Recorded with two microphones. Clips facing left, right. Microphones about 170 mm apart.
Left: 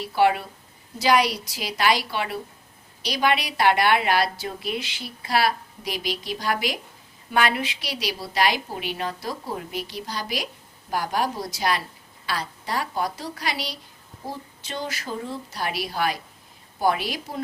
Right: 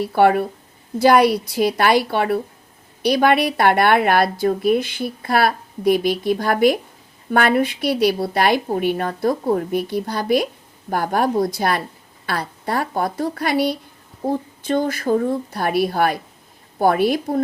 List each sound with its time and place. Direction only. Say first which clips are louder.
0.0 s speech: right 6 dB; 55° right (ahead or behind)